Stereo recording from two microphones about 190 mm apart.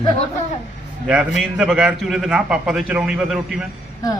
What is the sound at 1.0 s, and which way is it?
A man's voice, 5° right (ahead or behind).